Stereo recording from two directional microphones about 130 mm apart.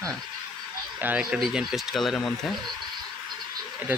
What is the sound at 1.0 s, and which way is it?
Speech, 15° right (ahead or behind).